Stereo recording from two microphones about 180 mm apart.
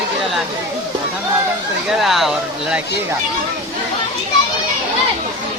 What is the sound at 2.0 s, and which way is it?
Speech, centre (ahead or behind).